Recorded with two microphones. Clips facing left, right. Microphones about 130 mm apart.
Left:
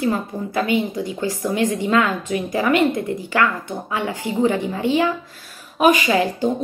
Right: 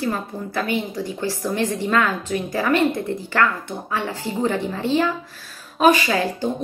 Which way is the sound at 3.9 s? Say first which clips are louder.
Left 1 dB; 15° left (ahead or behind).